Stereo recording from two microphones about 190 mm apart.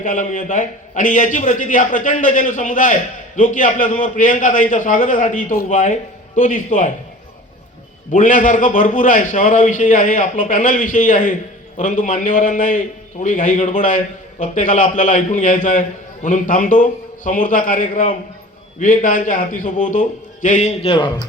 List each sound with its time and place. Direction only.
0.0 s a man's voice: 40° left (ahead or behind)
8.1 s a man's voice: 45° left (ahead or behind); by 21.1 s 25° left (ahead or behind)